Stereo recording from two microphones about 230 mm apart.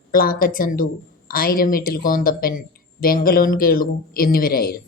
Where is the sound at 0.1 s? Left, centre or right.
Left.